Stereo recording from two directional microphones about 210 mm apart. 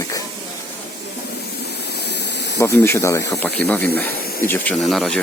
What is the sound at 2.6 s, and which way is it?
Speech, 10° left (ahead or behind).